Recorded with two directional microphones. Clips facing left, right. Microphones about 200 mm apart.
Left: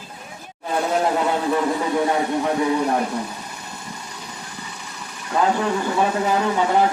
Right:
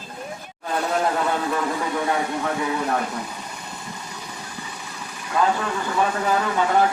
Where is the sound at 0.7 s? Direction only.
20° left (ahead or behind).